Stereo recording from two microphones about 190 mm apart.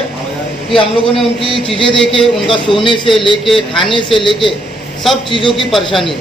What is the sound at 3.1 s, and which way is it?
A man's voice, 25° left (ahead or behind).